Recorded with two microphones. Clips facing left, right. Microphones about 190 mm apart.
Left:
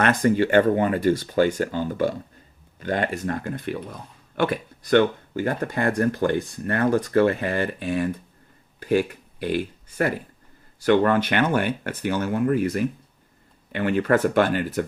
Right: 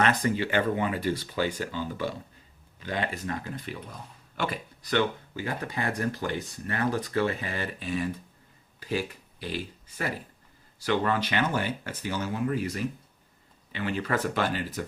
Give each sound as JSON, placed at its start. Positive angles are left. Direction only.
{"t": 0.0, "sound": "speech", "side_deg": 50}